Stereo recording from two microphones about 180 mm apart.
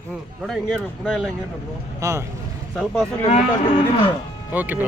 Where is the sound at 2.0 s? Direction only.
15° right (ahead or behind).